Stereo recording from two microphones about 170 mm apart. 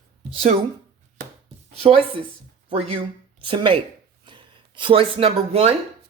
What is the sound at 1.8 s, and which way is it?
Speech, 30° right (ahead or behind).